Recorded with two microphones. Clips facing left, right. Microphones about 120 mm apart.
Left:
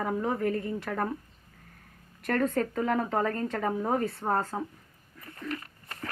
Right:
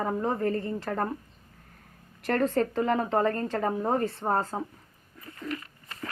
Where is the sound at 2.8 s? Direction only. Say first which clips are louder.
Right 2 dB; 5° right (ahead or behind).